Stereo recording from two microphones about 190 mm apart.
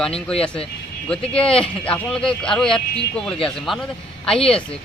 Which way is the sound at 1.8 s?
5° left (ahead or behind).